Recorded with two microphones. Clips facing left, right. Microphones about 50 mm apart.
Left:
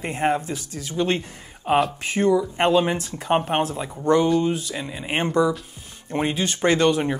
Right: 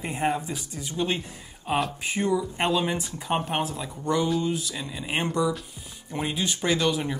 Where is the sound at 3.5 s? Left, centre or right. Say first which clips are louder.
Left 5 dB; left.